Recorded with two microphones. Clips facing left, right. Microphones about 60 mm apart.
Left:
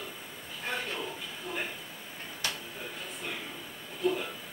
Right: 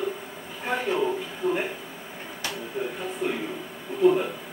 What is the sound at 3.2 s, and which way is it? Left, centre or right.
Speech, centre.